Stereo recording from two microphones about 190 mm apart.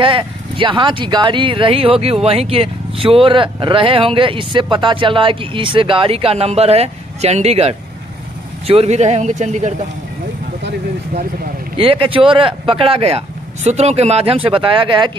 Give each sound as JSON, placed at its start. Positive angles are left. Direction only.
{"t": 0.0, "sound": "speech", "side_deg": -25}
{"t": 11.7, "sound": "speech", "side_deg": -30}